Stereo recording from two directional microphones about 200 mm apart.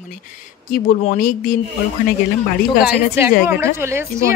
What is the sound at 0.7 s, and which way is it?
Speech, 45° left (ahead or behind).